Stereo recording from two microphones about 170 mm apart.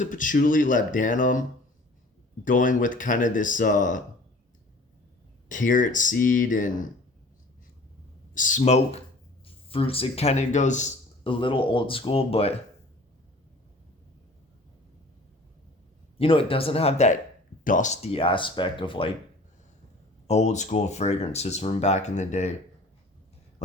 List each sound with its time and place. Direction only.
0.0 s speech: 50° left (ahead or behind)
5.5 s speech: 50° left (ahead or behind)
8.4 s a man's voice: 50° left (ahead or behind)
16.1 s a man's voice: 35° left (ahead or behind)
17.6 s a man's voice: 50° left (ahead or behind); by 19.1 s 30° left (ahead or behind)
20.2 s a man's voice: 40° left (ahead or behind)